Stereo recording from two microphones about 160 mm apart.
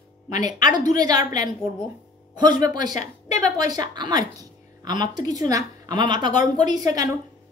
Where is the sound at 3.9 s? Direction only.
25° right (ahead or behind).